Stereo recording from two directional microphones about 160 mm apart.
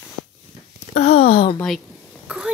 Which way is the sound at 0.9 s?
40° left (ahead or behind).